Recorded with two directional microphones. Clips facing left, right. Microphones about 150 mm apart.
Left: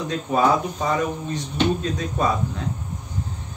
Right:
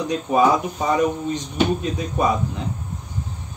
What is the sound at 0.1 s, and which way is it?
Speech, 15° right (ahead or behind).